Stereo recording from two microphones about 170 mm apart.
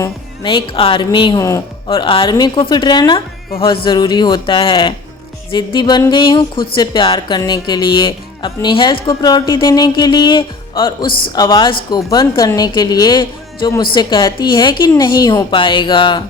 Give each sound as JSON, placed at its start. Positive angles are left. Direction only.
{"t": 0.4, "sound": "speech", "side_deg": 30}
{"t": 1.9, "sound": "speech", "side_deg": 30}